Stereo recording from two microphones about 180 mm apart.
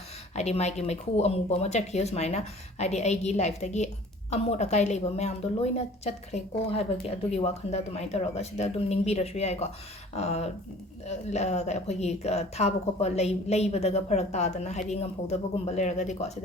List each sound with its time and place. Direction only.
0.3 s speech: 40° left (ahead or behind)